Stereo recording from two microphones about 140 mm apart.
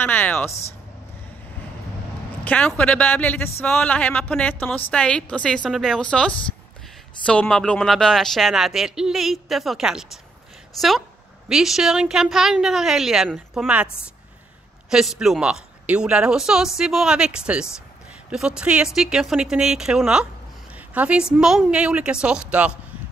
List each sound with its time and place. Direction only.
0.0 s a man's voice: 15° left (ahead or behind)
0.5 s speech: 50° left (ahead or behind)
2.4 s a man's voice: 10° left (ahead or behind)
14.9 s a woman's voice: 5° right (ahead or behind)